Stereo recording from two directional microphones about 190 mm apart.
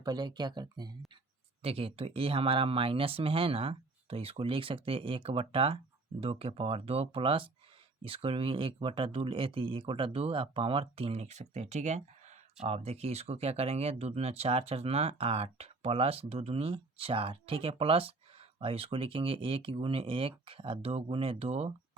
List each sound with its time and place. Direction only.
0.0 s speech: 20° right (ahead or behind)